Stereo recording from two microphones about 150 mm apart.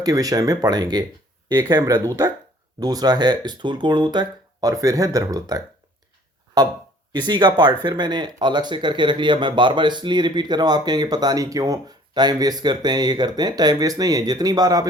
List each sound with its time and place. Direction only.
0.0 s speech: 25° right (ahead or behind)